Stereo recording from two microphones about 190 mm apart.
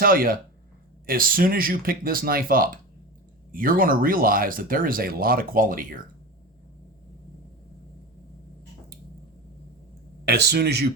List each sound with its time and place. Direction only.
0.0 s speech: 50° right (ahead or behind)
10.2 s speech: 60° right (ahead or behind)